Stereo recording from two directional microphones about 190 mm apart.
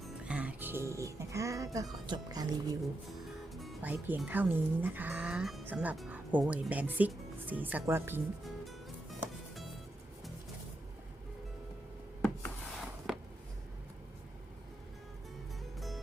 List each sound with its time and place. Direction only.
0.0 s music: 5° right (ahead or behind)
3.5 s speech: centre (ahead or behind)
12.2 s a sound: 5° left (ahead or behind)